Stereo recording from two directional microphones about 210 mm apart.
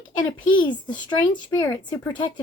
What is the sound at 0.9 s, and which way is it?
Speech, 20° left (ahead or behind).